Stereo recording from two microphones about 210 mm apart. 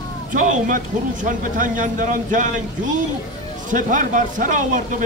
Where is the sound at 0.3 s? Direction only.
40° right (ahead or behind).